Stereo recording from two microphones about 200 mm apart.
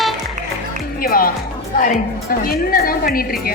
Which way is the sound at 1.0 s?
45° left (ahead or behind).